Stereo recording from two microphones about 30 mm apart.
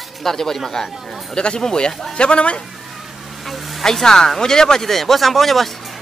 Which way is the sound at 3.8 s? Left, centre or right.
Centre.